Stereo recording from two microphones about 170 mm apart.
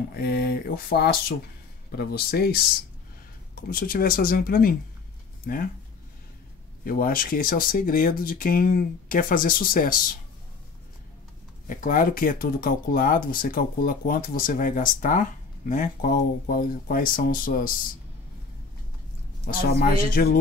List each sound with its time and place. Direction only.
0.1 s speech: 65° left (ahead or behind)
3.7 s speech: 60° left (ahead or behind)
6.8 s speech: 60° left (ahead or behind)
11.6 s speech: 50° left (ahead or behind)
19.4 s speech: 60° left (ahead or behind)